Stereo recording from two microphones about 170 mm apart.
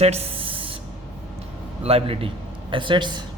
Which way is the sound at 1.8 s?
35° right (ahead or behind).